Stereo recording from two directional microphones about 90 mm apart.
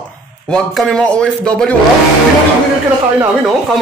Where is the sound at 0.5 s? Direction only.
5° left (ahead or behind).